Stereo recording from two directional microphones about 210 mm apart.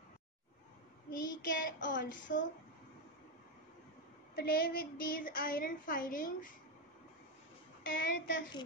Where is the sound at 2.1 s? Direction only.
40° left (ahead or behind).